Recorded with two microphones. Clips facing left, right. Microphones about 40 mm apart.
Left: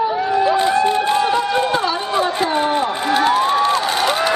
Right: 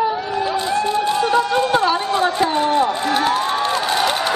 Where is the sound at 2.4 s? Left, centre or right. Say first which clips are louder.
Right 1 dB; centre.